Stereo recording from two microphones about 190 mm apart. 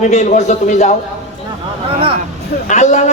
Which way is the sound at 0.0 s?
40° left (ahead or behind).